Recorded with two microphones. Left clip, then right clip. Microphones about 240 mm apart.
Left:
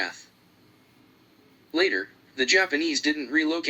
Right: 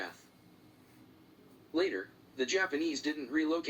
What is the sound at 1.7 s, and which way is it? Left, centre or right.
Speech, left.